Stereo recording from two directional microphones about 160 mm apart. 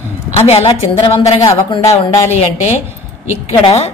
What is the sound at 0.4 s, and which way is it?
Speech, 40° left (ahead or behind).